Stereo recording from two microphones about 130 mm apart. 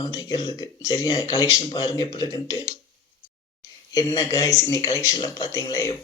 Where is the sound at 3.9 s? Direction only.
25° left (ahead or behind).